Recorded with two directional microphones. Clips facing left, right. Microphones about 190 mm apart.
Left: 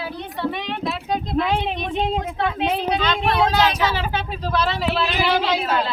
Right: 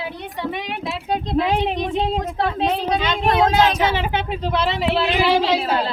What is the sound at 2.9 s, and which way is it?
Vehicle, 20° right (ahead or behind).